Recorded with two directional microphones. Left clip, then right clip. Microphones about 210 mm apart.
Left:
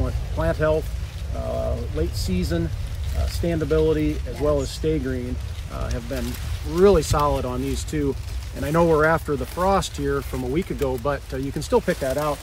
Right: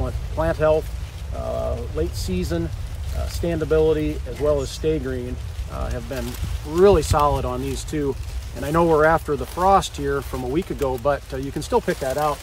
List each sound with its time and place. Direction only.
0.0 s music: 15° right (ahead or behind)
2.3 s speech: 15° right (ahead or behind)